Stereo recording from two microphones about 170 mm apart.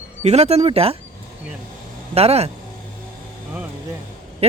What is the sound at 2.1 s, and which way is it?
Speech, 35° right (ahead or behind).